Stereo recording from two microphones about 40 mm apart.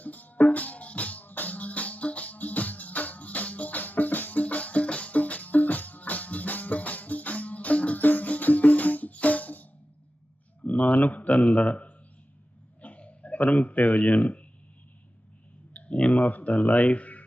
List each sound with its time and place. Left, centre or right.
0.0 s music: left
10.6 s a sound: left
13.5 s a man's voice: left
15.7 s clicking: left